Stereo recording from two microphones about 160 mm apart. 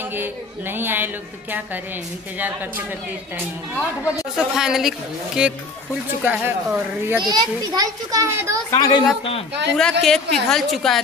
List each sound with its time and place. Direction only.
0.1 s a woman's voice: 15° right (ahead or behind)
3.7 s speech: 15° left (ahead or behind)
4.4 s a woman's voice: 5° right (ahead or behind)
7.2 s a child's voice: 25° right (ahead or behind)
8.6 s a woman's voice: 25° left (ahead or behind)
9.8 s a woman's voice: 5° left (ahead or behind)